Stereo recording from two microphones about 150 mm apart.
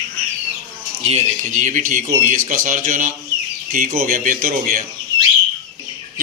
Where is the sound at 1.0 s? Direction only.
45° right (ahead or behind); by 4.8 s 60° right (ahead or behind).